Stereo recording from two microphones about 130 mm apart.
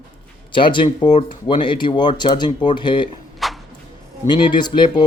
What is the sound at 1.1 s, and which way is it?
Speech, 70° left (ahead or behind).